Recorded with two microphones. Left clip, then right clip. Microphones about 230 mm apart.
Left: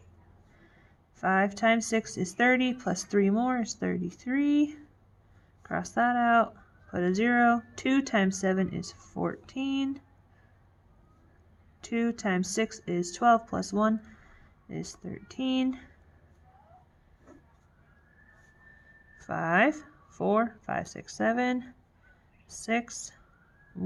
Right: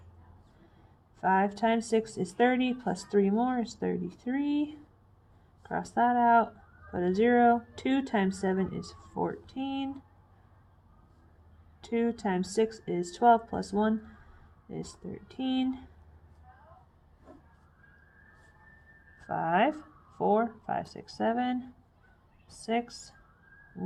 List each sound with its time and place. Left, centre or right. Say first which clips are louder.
1.2 s speech: left 1 dB; left
11.8 s speech: right 1 dB; left
19.2 s speech: left 2 dB; left